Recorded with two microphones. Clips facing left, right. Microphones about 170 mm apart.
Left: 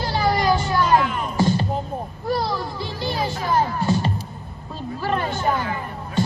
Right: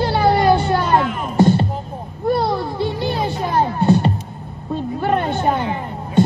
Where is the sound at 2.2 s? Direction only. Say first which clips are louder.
Right 6 dB; 55° right (ahead or behind).